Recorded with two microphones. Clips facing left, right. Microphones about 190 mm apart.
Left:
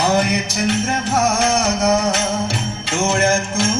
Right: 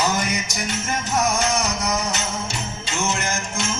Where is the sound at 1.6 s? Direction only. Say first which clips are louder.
Left 6 dB; 55° left (ahead or behind).